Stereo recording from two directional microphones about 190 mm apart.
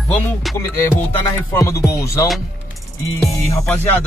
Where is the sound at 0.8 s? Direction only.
15° left (ahead or behind).